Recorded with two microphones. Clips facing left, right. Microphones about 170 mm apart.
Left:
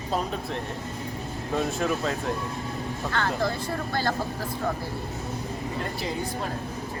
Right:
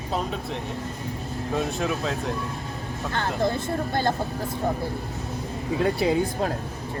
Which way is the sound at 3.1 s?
20° right (ahead or behind).